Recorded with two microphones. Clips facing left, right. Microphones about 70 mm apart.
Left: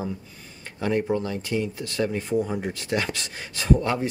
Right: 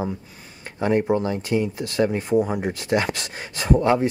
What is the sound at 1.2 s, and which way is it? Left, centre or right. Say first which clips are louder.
Speech: right 4 dB; right.